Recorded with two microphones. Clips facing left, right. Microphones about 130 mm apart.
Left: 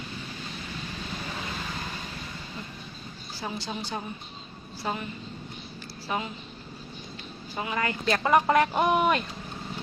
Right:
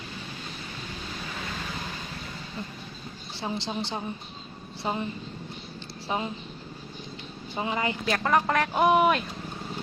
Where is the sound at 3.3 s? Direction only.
25° right (ahead or behind).